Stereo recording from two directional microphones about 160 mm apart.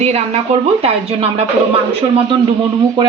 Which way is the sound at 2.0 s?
30° right (ahead or behind).